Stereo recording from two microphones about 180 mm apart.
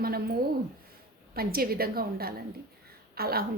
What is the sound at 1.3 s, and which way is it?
A woman's voice, 55° right (ahead or behind).